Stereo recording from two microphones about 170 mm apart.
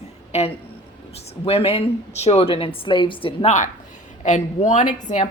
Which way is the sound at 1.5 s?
35° left (ahead or behind).